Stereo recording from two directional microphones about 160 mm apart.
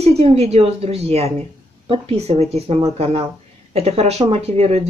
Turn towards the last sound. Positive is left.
turn(degrees=-40)  # may be behind; listen again after turning